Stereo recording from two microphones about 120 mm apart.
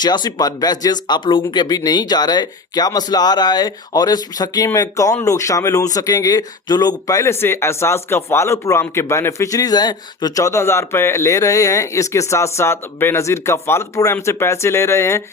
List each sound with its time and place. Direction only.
0.0 s speech: 35° left (ahead or behind)